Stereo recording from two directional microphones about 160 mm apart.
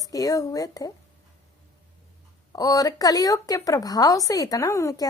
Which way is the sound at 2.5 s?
20° left (ahead or behind).